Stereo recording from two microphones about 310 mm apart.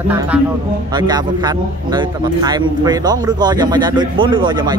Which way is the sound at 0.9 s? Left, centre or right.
Centre.